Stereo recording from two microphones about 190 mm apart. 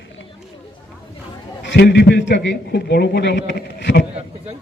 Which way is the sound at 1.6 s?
65° left (ahead or behind).